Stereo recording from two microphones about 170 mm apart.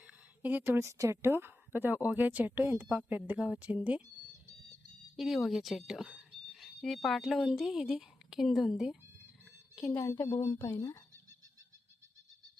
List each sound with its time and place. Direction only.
0.0 s a woman's voice: 10° right (ahead or behind)
5.1 s a woman's voice: centre (ahead or behind)
10.0 s speech: 15° left (ahead or behind)